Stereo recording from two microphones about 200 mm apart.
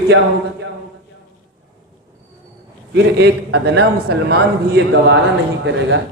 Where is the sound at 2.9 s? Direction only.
60° right (ahead or behind).